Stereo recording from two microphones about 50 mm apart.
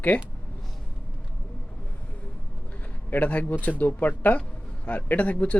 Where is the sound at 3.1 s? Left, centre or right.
Left.